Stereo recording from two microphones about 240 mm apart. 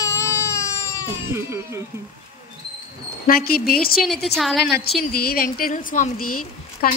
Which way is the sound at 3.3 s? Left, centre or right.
Left.